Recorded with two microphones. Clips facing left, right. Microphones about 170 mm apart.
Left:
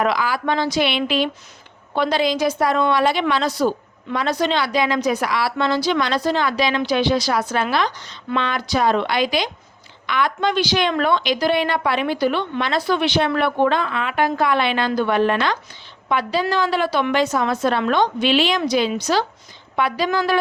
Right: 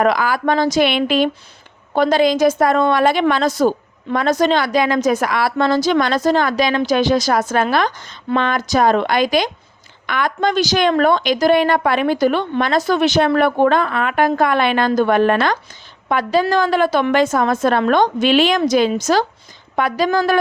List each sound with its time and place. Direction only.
0.0 s a woman's voice: 50° right (ahead or behind)